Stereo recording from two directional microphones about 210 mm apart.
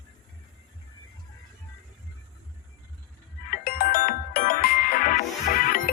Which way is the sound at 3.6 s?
45° left (ahead or behind).